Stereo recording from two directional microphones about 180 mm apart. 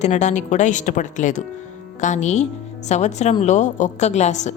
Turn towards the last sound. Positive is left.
turn(degrees=40)  # may be behind; listen again after turning